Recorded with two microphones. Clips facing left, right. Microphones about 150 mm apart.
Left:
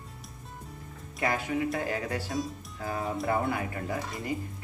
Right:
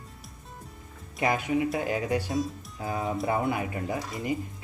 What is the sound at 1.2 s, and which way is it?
Speech, 20° right (ahead or behind).